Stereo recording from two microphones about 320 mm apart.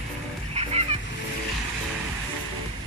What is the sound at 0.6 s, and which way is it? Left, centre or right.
Music, centre.